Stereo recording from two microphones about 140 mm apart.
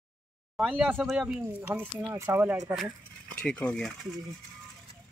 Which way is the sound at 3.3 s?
5° left (ahead or behind).